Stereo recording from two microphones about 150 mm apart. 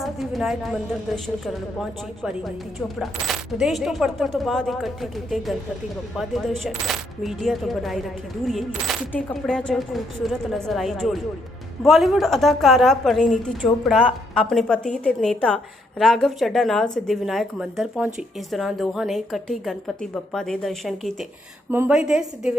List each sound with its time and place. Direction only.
0.0 s a woman's voice: centre (ahead or behind)
21.7 s a woman's voice: 15° right (ahead or behind)
21.9 s a woman's voice: 5° right (ahead or behind)